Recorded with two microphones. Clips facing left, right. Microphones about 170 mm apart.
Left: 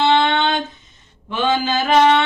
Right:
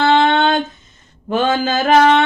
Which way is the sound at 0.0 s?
45° right (ahead or behind).